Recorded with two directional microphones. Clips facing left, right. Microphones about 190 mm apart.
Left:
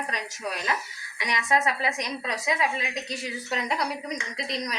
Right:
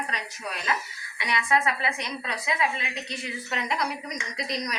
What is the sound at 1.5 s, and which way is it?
A woman's voice, 40° left (ahead or behind).